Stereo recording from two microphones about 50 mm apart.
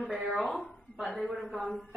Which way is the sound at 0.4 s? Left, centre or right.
Centre.